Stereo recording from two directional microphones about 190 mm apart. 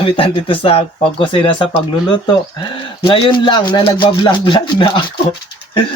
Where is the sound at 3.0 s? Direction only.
30° left (ahead or behind).